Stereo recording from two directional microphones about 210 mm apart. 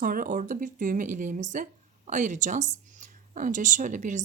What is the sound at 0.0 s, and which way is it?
A woman's voice, 40° right (ahead or behind).